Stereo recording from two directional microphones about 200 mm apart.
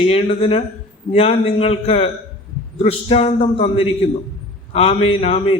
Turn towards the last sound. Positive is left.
turn(degrees=30)  # may be behind; listen again after turning